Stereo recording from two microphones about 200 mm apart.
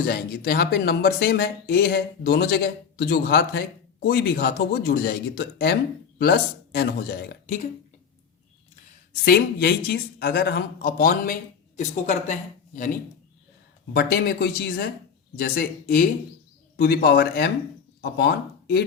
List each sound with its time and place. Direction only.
0.0 s speech: 50° left (ahead or behind)
9.2 s speech: 50° left (ahead or behind)